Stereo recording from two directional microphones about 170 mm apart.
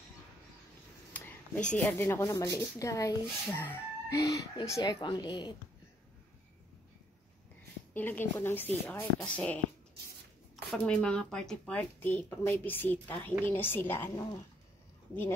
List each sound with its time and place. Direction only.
1.1 s a woman's voice: 10° left (ahead or behind); by 5.6 s 25° left (ahead or behind)
7.9 s speech: 10° left (ahead or behind)
10.8 s speech: 5° left (ahead or behind)